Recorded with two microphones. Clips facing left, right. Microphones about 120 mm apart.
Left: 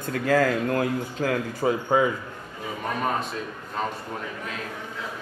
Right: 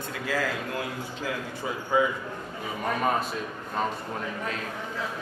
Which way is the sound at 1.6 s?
60° left (ahead or behind).